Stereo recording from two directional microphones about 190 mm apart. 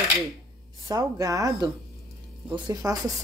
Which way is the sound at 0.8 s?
20° right (ahead or behind).